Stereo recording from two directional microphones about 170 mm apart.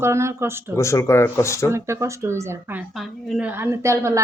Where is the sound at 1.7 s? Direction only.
15° right (ahead or behind).